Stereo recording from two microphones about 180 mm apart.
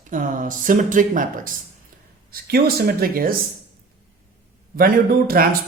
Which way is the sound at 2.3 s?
60° right (ahead or behind).